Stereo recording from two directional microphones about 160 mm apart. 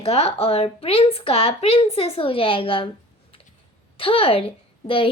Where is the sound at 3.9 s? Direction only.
35° left (ahead or behind).